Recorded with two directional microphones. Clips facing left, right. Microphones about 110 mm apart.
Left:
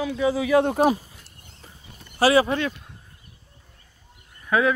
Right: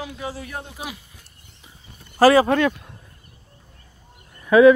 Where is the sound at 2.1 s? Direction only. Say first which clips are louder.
Right 4 dB; 40° right (ahead or behind).